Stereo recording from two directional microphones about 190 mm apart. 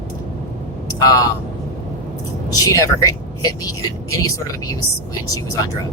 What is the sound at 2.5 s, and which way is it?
Speech, 20° left (ahead or behind).